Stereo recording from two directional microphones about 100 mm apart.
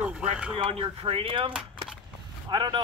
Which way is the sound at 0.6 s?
70° right (ahead or behind).